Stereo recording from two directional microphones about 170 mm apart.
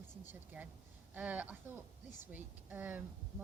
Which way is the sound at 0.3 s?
10° right (ahead or behind).